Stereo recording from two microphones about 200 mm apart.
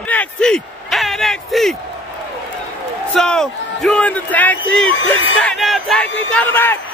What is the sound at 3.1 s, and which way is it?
A man's voice, 5° left (ahead or behind).